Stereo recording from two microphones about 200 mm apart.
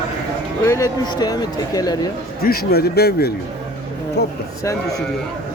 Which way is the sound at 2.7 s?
50° left (ahead or behind).